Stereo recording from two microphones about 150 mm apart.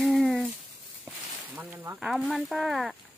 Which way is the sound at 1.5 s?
15° right (ahead or behind).